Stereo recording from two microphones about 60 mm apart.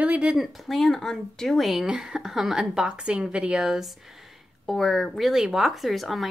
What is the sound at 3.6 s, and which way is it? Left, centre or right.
Speech, centre.